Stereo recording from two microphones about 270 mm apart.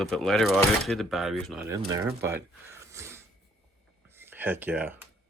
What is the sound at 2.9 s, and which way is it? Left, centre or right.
Snort, centre.